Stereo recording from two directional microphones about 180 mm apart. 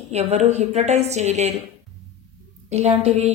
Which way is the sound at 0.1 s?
35° right (ahead or behind).